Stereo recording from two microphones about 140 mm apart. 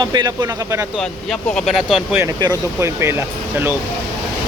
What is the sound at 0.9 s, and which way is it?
Speech, 5° left (ahead or behind).